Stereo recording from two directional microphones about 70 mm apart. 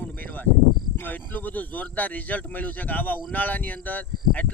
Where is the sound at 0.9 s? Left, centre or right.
Left.